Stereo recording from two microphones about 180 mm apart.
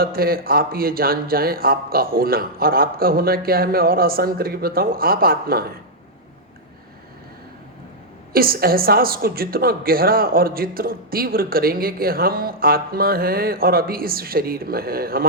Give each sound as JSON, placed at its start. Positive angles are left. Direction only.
{"t": 0.0, "sound": "a woman's voice", "side_deg": -55}
{"t": 8.3, "sound": "a woman's voice", "side_deg": -55}